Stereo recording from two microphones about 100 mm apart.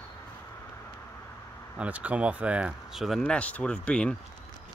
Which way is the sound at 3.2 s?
10° left (ahead or behind).